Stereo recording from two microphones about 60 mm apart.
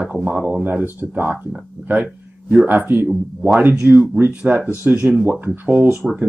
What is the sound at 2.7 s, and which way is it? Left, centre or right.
Speech, right.